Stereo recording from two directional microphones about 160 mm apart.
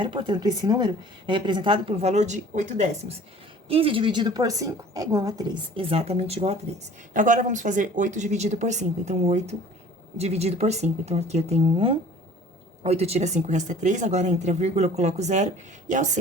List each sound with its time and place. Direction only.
0.0 s a woman's voice: 30° right (ahead or behind)
5.7 s speech: 35° right (ahead or behind)
7.1 s speech: 55° right (ahead or behind)